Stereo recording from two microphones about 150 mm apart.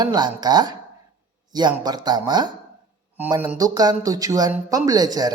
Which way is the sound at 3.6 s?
25° right (ahead or behind).